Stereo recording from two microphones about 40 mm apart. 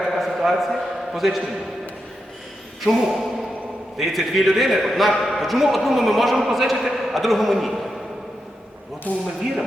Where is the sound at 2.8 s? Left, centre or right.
Centre.